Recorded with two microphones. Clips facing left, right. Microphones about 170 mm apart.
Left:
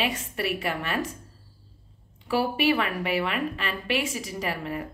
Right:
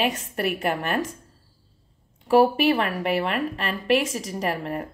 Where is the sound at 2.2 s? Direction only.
40° right (ahead or behind).